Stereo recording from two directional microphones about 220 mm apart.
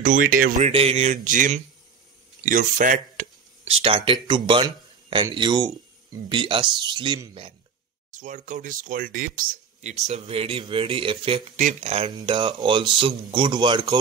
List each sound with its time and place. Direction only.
0.0 s speech: 40° right (ahead or behind); by 7.5 s 20° right (ahead or behind)
8.1 s speech: 35° right (ahead or behind); by 13.9 s 20° right (ahead or behind)